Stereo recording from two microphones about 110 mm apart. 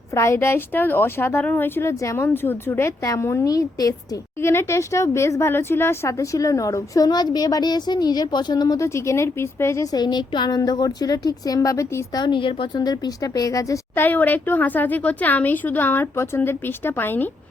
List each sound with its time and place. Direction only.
0.1 s a woman's voice: 25° left (ahead or behind)
12.2 s a woman's voice: 50° left (ahead or behind); by 13.7 s 30° left (ahead or behind)
13.9 s speech: 20° left (ahead or behind)